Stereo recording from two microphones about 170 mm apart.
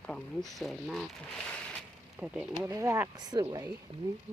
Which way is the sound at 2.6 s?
20° right (ahead or behind).